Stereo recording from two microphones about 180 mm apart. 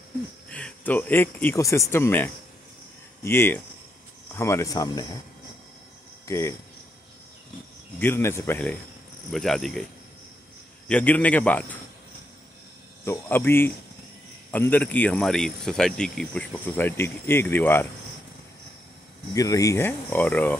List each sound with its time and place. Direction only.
0.5 s speech: 5° left (ahead or behind)
6.2 s speech: 15° left (ahead or behind)
8.0 s speech: 15° left (ahead or behind)
10.9 s speech: 10° left (ahead or behind)
13.0 s speech: 10° left (ahead or behind)
19.3 s speech: 20° left (ahead or behind)